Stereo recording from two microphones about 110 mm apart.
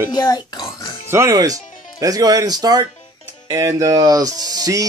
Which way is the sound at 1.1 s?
30° right (ahead or behind).